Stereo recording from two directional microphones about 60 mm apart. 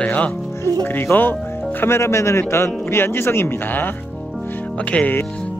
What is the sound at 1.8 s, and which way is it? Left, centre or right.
A man's voice, left.